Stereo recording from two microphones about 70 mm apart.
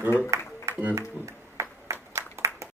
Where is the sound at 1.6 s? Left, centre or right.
Right.